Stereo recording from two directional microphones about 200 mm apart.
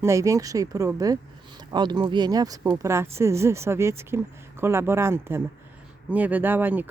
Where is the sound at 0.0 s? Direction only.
15° right (ahead or behind).